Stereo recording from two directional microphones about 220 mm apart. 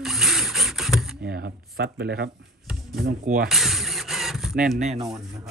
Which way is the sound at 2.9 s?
40° right (ahead or behind).